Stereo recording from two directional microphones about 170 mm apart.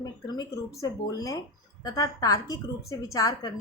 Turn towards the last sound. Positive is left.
turn(degrees=20)  # may be behind; listen again after turning